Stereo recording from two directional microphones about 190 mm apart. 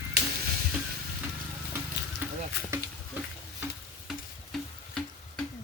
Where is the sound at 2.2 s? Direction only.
10° right (ahead or behind).